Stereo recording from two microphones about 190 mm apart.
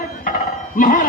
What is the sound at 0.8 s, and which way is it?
Speech, 45° left (ahead or behind).